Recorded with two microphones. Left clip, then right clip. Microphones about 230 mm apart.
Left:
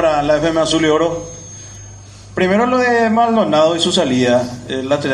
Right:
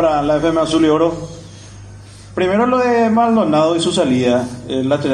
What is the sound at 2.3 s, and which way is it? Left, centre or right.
A man's voice, left.